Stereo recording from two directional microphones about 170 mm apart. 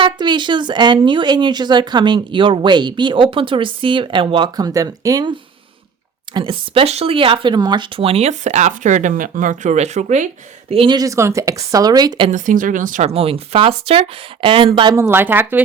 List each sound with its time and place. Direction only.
0.0 s speech: 25° right (ahead or behind)
6.3 s speech: 30° right (ahead or behind)
10.7 s speech: 30° right (ahead or behind)
12.3 s speech: 50° right (ahead or behind); by 14.9 s 30° right (ahead or behind)
14.9 s speech: 15° right (ahead or behind)